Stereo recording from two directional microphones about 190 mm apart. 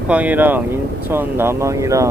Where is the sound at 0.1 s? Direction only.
10° right (ahead or behind).